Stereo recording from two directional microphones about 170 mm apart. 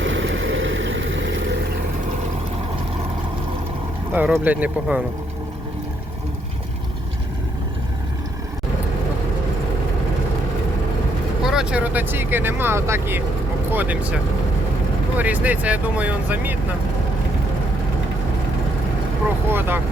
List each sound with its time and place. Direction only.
0.0 s vehicle: 90° right
4.1 s speech: 10° right (ahead or behind)
11.4 s speech: 5° right (ahead or behind)
15.2 s speech: 10° right (ahead or behind)
19.5 s speech: 10° right (ahead or behind)